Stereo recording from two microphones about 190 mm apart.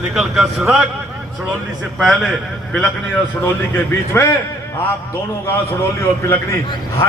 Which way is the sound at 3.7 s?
15° left (ahead or behind).